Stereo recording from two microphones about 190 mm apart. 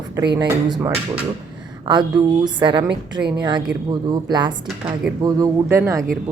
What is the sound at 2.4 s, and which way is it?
A woman's voice, 25° right (ahead or behind).